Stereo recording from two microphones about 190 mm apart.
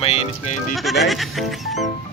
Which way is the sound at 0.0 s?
30° left (ahead or behind).